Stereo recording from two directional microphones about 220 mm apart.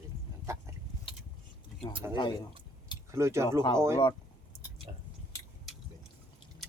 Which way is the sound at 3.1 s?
10° right (ahead or behind).